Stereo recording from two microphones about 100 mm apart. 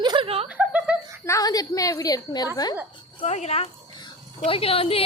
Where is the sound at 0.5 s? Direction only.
15° right (ahead or behind).